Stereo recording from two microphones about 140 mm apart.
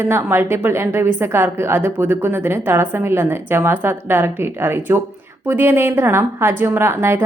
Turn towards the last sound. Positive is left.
turn(degrees=-20)  # may be behind; listen again after turning